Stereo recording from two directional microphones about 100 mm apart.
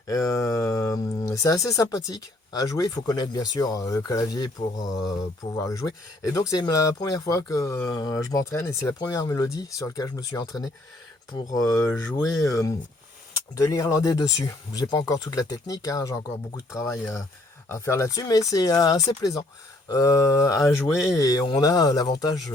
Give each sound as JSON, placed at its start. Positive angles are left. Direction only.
{"t": 0.1, "sound": "speech", "side_deg": 35}